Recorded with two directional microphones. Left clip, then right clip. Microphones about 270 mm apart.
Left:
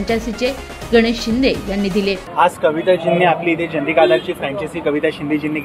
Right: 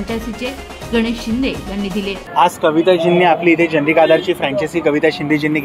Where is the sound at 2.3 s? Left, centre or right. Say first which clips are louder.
Right 3 dB; right.